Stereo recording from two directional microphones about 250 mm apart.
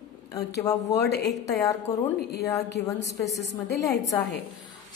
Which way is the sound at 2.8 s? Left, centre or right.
Left.